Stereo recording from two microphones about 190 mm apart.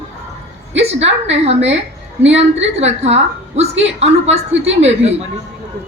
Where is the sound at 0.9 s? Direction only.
35° right (ahead or behind).